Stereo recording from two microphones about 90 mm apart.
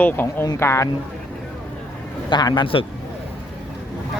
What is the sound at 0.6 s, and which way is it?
Speech, 30° left (ahead or behind).